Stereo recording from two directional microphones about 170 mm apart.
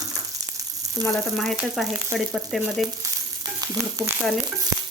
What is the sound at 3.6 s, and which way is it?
Speech, 20° right (ahead or behind).